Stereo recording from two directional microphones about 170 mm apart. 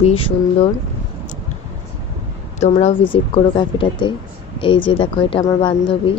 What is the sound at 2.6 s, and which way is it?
Speech, 40° left (ahead or behind).